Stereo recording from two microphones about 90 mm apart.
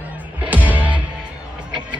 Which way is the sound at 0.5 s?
20° right (ahead or behind).